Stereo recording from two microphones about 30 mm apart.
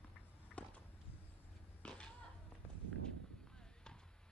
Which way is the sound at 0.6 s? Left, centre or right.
Left.